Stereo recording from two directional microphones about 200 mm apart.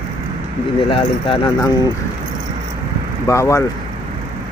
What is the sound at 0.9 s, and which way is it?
Speech, 25° left (ahead or behind).